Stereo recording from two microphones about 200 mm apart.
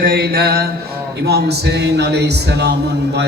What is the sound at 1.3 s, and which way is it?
Speech, 55° right (ahead or behind).